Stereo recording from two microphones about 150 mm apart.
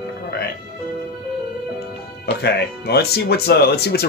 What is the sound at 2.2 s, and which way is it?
Speech, 90° left.